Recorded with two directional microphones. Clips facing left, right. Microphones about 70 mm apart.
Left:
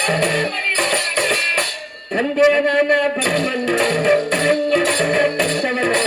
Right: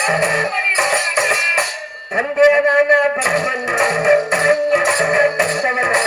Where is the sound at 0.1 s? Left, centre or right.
Centre.